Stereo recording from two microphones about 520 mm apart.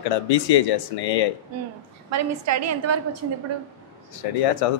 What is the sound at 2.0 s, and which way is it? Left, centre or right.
A woman's voice, right.